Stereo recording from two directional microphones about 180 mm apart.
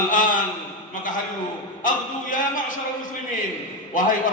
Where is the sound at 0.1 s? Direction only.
50° left (ahead or behind).